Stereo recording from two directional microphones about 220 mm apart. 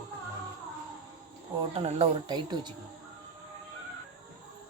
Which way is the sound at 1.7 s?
25° right (ahead or behind).